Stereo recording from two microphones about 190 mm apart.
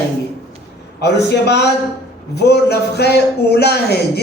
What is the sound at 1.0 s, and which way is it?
Speech, 60° left (ahead or behind).